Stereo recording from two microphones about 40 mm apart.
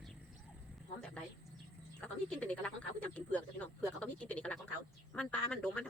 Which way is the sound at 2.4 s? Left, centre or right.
Left.